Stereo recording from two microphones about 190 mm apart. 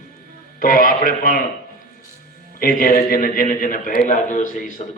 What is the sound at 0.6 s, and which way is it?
Speech, 50° left (ahead or behind).